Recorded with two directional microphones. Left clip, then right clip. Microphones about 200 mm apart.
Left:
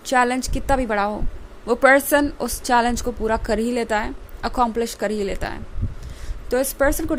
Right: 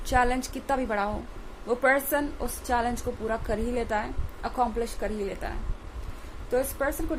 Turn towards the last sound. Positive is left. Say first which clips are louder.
# left 8 dB
turn(degrees=45)  # may be behind; listen again after turning